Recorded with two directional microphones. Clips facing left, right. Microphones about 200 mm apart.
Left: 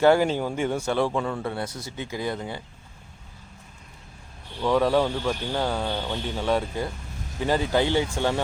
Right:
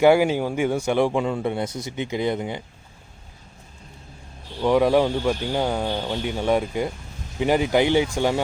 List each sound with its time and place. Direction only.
0.0 s speech: 10° right (ahead or behind)
4.6 s speech: 15° right (ahead or behind)